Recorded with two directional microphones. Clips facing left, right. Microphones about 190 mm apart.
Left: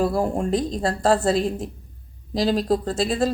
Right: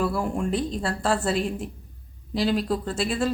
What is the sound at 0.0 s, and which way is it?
Speech, 40° left (ahead or behind).